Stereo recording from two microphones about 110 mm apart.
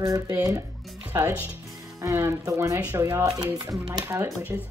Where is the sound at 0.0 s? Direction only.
30° right (ahead or behind).